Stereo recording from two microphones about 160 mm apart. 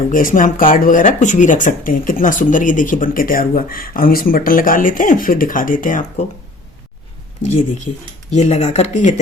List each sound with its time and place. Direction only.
0.1 s speech: 55° left (ahead or behind)
8.3 s speech: 45° left (ahead or behind)